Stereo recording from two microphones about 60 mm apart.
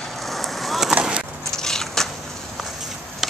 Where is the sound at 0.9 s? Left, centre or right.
Centre.